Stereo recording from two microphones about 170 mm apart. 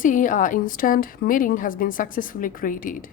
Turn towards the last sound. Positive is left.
turn(degrees=50)  # may be behind; listen again after turning